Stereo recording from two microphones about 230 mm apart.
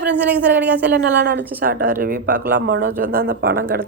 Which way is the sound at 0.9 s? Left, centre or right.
Right.